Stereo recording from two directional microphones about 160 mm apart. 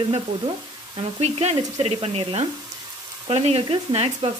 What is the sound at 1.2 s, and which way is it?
Speech, 40° right (ahead or behind).